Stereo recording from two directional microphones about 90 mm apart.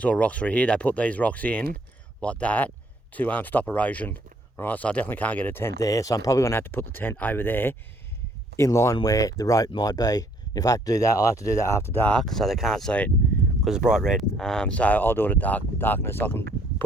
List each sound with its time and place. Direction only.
0.0 s speech: 15° left (ahead or behind)
5.8 s speech: 40° left (ahead or behind)
6.6 s speech: 25° left (ahead or behind)
8.5 s speech: 35° left (ahead or behind)
12.0 s speech: 5° left (ahead or behind)
13.6 s speech: 5° right (ahead or behind)
14.3 s speech: 5° left (ahead or behind); by 16.8 s 20° left (ahead or behind)